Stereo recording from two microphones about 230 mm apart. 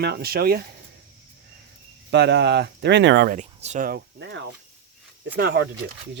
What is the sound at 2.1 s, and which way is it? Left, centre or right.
Speech, right.